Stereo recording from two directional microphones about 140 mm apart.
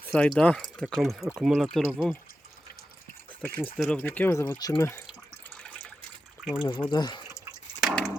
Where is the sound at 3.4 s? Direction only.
10° left (ahead or behind).